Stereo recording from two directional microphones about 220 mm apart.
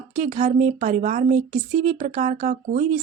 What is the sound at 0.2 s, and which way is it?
A woman's voice, 35° right (ahead or behind).